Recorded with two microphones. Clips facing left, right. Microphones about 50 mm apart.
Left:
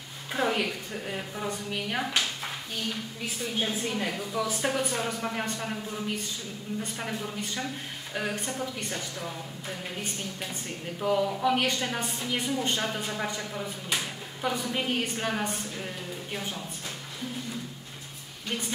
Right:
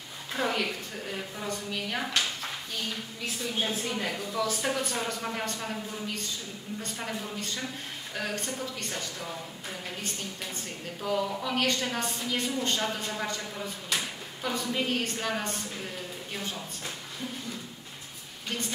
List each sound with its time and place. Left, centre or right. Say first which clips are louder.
0.3 s a woman's voice: left 2 dB; centre
11.0 s speech: left 4 dB; centre